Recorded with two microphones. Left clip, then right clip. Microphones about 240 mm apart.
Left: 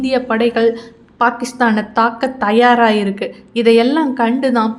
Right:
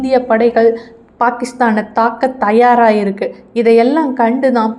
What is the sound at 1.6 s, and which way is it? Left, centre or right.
Speech, left.